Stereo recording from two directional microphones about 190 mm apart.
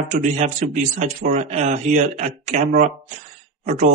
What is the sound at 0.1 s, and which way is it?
A man's voice, 40° right (ahead or behind).